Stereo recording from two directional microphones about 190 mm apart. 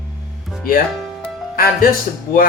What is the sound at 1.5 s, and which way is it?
Speech, 50° left (ahead or behind).